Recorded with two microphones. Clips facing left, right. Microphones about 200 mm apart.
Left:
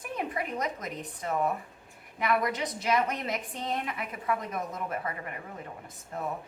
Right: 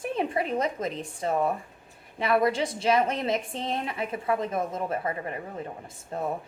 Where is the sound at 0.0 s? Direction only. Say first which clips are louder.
Right 6 dB; 30° right (ahead or behind).